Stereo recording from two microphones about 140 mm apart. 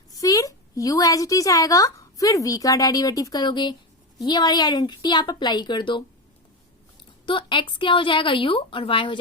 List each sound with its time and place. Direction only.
0.1 s a woman's voice: 25° left (ahead or behind)
7.3 s a woman's voice: 35° left (ahead or behind)